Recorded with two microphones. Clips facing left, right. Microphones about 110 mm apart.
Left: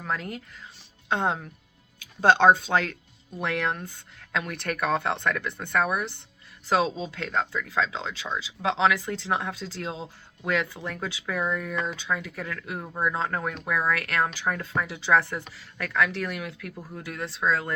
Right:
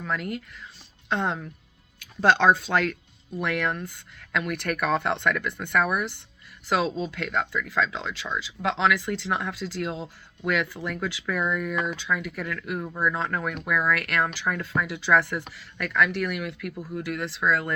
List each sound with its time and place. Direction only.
0.0 s speech: 40° left (ahead or behind)